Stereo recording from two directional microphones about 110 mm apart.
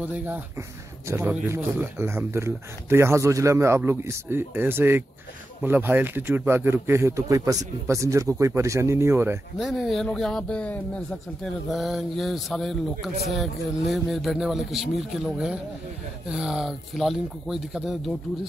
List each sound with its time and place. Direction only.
0.0 s speech: 15° right (ahead or behind)
9.6 s speech: centre (ahead or behind)
11.7 s speech: centre (ahead or behind)